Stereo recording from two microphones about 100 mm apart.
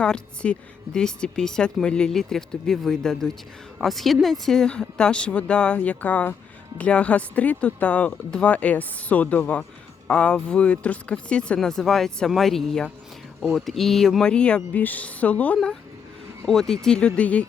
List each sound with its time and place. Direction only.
0.0 s speech: 10° left (ahead or behind)
16.5 s speech: 5° left (ahead or behind)